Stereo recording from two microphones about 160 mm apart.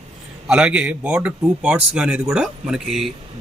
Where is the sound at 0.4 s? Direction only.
5° right (ahead or behind).